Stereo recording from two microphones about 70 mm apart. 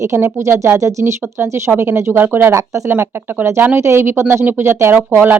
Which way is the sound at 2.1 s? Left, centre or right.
Right.